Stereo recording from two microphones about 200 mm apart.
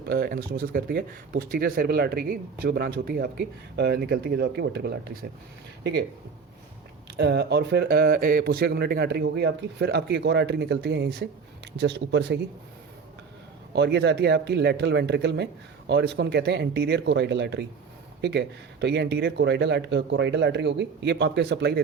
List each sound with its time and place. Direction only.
0.1 s speech: 50° right (ahead or behind)
7.2 s a man's voice: 55° right (ahead or behind)
13.7 s a man's voice: 60° right (ahead or behind)